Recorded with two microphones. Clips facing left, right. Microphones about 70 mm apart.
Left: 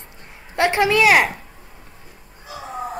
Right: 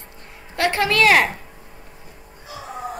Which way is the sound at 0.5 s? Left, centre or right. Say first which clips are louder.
Left 2 dB; left.